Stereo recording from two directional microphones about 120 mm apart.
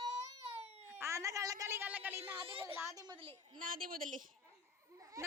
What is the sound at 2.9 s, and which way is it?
Speech, 35° right (ahead or behind).